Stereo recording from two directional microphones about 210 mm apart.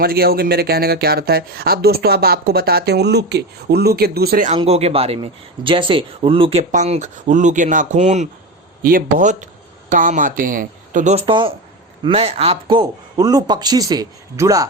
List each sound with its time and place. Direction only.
0.0 s speech: 45° right (ahead or behind)
4.5 s speech: 30° right (ahead or behind)